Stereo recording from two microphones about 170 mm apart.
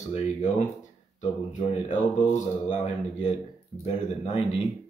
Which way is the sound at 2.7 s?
40° left (ahead or behind).